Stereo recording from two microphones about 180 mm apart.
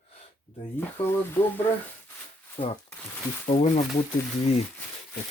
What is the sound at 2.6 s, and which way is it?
Speech, 35° left (ahead or behind).